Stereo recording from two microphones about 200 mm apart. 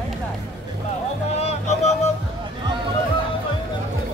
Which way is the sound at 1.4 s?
30° left (ahead or behind).